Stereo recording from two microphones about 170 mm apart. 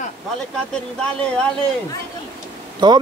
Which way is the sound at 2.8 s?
25° right (ahead or behind).